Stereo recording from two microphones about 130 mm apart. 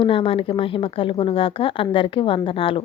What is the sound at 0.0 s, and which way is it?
Speech, 45° left (ahead or behind).